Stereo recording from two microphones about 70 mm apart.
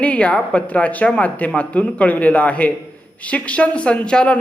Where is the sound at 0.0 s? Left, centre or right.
Centre.